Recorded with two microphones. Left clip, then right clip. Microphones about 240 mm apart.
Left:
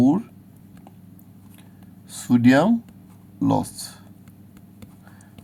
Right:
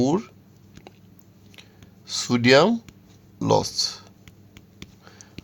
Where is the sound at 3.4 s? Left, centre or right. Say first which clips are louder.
Right 3 dB; right.